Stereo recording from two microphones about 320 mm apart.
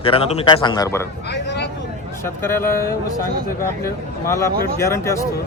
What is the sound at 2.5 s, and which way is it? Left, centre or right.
Speech, centre.